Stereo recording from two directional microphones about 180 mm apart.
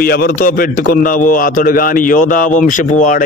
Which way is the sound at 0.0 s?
55° left (ahead or behind).